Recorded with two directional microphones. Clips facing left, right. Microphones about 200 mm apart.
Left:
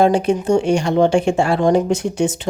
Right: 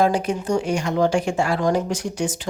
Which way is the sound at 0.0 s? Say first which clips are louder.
Left 5 dB; 25° left (ahead or behind).